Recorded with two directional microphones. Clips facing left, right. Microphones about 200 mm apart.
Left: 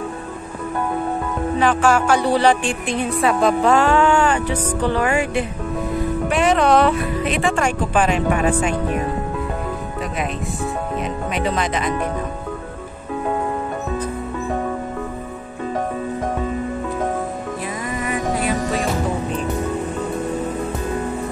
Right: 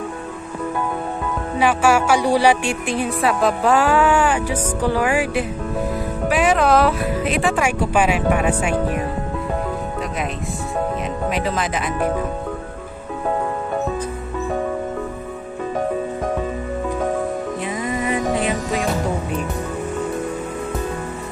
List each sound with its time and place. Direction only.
1.6 s a woman's voice: 10° right (ahead or behind)
11.2 s speech: centre (ahead or behind)
17.8 s music: 20° right (ahead or behind)